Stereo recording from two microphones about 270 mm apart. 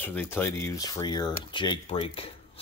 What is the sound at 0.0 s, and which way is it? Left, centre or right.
Speech, centre.